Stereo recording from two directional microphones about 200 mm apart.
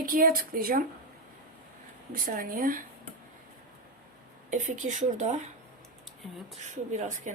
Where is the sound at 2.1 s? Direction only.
45° right (ahead or behind).